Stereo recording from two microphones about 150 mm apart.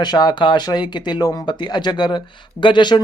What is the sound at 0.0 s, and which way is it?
Speech, 30° left (ahead or behind).